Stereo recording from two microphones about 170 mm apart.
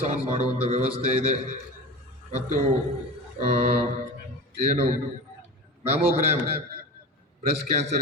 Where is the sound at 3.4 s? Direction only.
40° right (ahead or behind).